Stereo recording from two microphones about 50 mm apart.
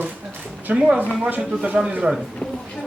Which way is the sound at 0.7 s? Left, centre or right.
Right.